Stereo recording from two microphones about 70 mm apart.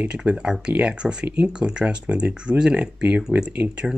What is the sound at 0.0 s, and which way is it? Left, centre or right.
Speech, centre.